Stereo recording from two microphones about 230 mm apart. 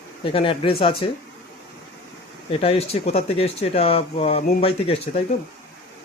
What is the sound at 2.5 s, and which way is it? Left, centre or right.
Speech, left.